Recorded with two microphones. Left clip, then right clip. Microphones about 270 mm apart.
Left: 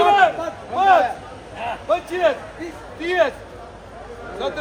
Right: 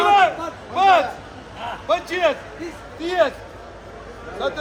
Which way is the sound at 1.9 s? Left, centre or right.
Right.